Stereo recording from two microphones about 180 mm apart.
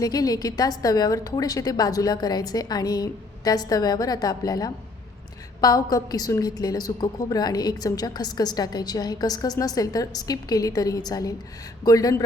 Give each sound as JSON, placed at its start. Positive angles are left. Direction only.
{"t": 0.0, "sound": "a woman's voice", "side_deg": 20}